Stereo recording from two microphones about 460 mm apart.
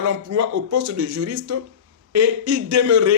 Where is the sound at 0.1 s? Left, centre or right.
Right.